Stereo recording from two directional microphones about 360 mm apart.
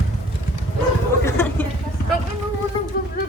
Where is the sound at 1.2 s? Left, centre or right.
Centre.